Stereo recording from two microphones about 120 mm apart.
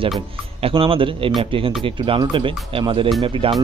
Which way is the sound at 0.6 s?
50° right (ahead or behind).